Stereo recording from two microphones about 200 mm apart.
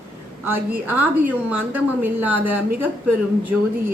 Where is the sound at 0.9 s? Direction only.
10° right (ahead or behind).